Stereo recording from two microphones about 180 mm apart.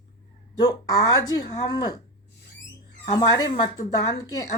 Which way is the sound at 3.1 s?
20° left (ahead or behind).